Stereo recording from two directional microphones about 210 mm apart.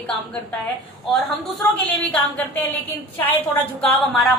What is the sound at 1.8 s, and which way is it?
A woman's voice, 5° left (ahead or behind).